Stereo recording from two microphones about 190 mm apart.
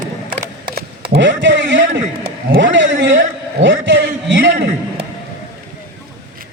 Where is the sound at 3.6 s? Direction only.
70° right (ahead or behind).